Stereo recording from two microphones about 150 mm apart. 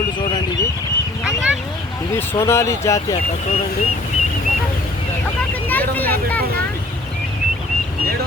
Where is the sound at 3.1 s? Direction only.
40° left (ahead or behind).